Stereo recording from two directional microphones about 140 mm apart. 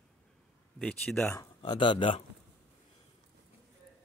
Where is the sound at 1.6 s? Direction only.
35° left (ahead or behind).